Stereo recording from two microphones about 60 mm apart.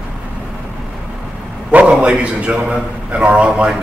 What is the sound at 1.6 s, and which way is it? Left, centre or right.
A man's voice, centre.